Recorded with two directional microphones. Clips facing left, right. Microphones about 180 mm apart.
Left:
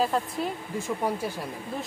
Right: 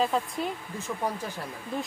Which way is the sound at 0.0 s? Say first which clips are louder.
Left 1 dB; centre (ahead or behind).